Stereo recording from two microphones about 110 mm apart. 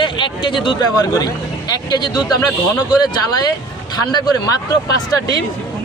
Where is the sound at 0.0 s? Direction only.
50° left (ahead or behind).